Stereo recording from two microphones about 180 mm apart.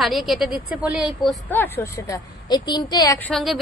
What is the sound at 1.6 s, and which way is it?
A woman's voice, 15° left (ahead or behind).